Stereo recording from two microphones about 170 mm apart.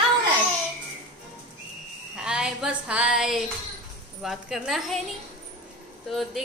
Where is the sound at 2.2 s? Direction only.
5° right (ahead or behind).